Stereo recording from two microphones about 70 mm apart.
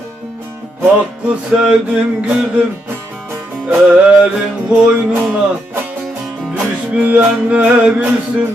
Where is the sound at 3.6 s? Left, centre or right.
Right.